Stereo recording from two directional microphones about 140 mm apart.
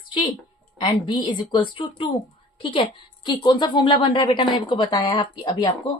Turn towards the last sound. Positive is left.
turn(degrees=35)  # may be behind; listen again after turning